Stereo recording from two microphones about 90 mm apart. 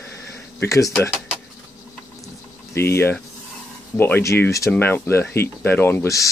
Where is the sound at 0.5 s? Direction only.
35° left (ahead or behind).